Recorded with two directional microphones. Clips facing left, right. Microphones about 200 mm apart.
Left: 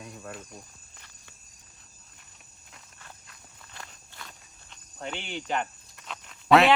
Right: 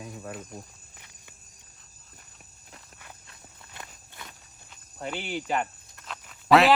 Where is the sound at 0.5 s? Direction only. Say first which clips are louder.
Right 4 dB; 15° right (ahead or behind).